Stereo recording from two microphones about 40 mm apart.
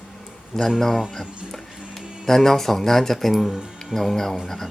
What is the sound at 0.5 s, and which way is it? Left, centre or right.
Speech, centre.